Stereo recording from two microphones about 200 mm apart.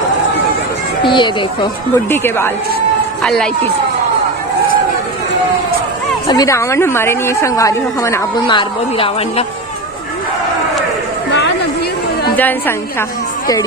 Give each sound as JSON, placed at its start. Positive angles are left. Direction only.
{"t": 1.1, "sound": "speech", "side_deg": 25}
{"t": 2.0, "sound": "a woman's voice", "side_deg": 10}
{"t": 6.2, "sound": "a woman's voice", "side_deg": 15}
{"t": 12.4, "sound": "a woman's voice", "side_deg": 10}